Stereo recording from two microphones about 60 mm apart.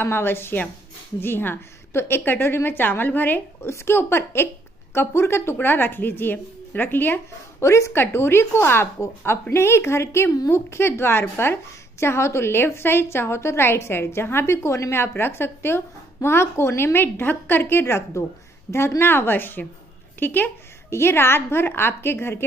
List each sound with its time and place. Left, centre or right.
0.0 s a woman's voice: left
3.6 s a woman's voice: left
7.6 s a woman's voice: left
20.9 s a woman's voice: left